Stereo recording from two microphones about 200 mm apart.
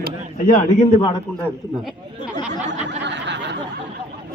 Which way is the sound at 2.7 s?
60° right (ahead or behind).